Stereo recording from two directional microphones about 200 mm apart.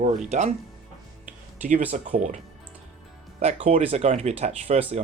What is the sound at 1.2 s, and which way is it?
Music, 40° right (ahead or behind).